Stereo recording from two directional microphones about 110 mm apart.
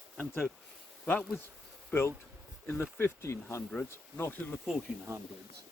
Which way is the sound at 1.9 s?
20° left (ahead or behind).